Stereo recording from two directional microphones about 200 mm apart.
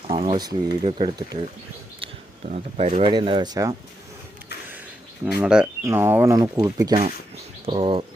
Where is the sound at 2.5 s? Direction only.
35° right (ahead or behind).